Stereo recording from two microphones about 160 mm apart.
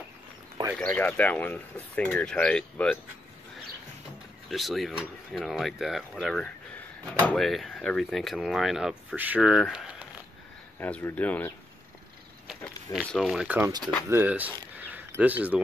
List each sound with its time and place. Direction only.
0.7 s speech: 10° left (ahead or behind)
4.5 s speech: centre (ahead or behind)
10.8 s speech: 10° left (ahead or behind)
12.6 s speech: 5° left (ahead or behind); by 14.5 s 10° right (ahead or behind)
14.9 s a sound: 10° right (ahead or behind)